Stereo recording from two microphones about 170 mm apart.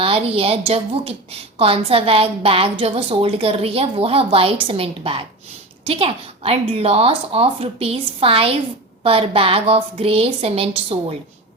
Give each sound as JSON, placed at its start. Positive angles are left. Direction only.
{"t": 0.0, "sound": "a woman's voice", "side_deg": -35}